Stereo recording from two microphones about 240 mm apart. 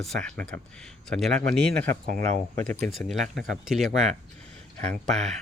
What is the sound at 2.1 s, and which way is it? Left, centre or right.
Speech, right.